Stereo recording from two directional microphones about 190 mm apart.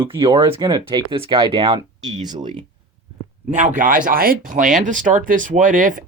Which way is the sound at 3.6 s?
40° right (ahead or behind).